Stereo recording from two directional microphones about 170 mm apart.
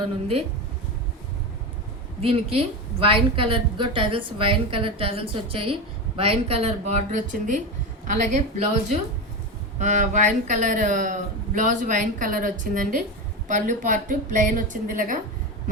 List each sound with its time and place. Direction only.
2.2 s a woman's voice: 35° right (ahead or behind)
9.7 s a man's voice: 45° right (ahead or behind)